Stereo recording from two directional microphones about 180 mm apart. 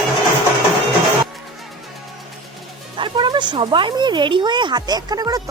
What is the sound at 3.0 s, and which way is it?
Speech, 25° right (ahead or behind).